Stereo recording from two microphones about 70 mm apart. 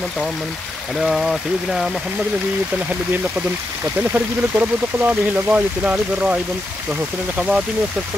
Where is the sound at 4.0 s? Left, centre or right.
Right.